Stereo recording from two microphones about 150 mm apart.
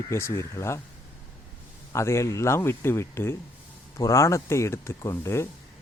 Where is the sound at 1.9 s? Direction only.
20° left (ahead or behind).